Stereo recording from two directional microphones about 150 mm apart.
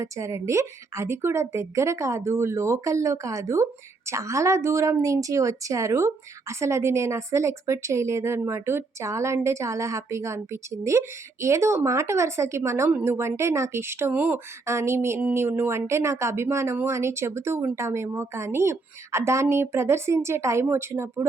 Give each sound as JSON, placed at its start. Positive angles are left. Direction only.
{"t": 0.0, "sound": "a woman's voice", "side_deg": -20}